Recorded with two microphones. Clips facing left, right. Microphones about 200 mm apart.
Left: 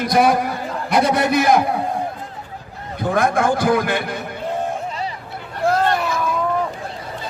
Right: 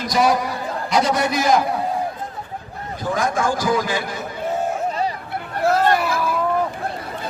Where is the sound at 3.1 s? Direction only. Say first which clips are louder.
Left 4 dB; 60° left (ahead or behind).